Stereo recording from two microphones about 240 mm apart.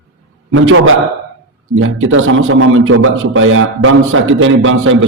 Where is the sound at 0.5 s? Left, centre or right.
Right.